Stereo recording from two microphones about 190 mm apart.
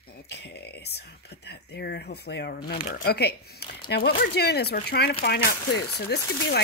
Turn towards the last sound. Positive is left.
turn(degrees=60)  # may be behind; listen again after turning